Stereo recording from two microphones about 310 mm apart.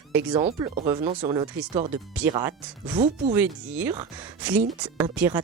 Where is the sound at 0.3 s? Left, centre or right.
Centre.